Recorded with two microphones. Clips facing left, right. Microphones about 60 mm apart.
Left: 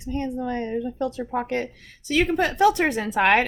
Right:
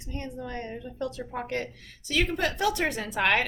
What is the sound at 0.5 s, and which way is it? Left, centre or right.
A woman's voice, left.